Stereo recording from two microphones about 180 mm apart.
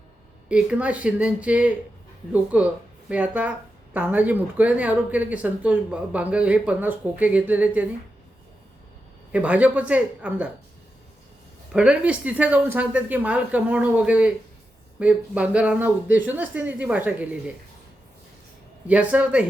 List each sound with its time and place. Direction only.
0.4 s speech: 5° right (ahead or behind)
9.3 s speech: 10° right (ahead or behind)
11.7 s speech: 5° right (ahead or behind)
18.9 s speech: 5° right (ahead or behind)